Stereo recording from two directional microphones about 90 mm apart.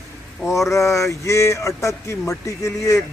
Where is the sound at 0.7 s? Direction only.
35° left (ahead or behind).